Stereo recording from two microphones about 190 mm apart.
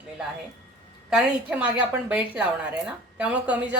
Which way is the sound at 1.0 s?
5° right (ahead or behind).